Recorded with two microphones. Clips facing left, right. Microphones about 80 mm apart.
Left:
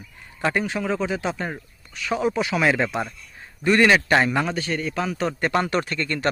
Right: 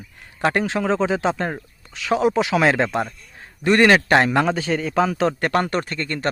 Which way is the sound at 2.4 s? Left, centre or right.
Right.